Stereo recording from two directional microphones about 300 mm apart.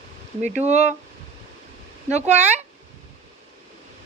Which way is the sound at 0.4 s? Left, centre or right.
Right.